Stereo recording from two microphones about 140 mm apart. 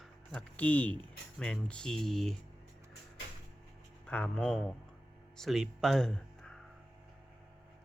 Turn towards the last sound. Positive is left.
turn(degrees=5)  # may be behind; listen again after turning